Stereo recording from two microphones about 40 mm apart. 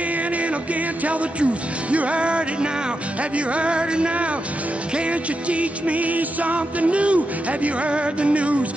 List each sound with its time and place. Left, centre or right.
1.0 s music: right
5.5 s music: right